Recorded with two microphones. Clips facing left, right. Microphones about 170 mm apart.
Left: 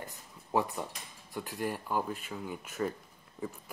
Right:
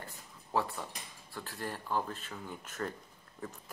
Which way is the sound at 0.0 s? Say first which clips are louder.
Left 3 dB; 15° left (ahead or behind).